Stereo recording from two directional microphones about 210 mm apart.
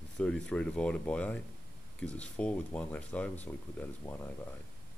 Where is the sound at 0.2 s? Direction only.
5° left (ahead or behind).